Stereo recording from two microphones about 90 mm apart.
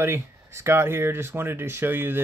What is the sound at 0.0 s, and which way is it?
Speech, 30° right (ahead or behind).